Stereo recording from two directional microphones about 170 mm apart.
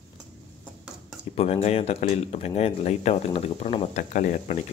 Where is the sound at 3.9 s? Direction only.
50° left (ahead or behind).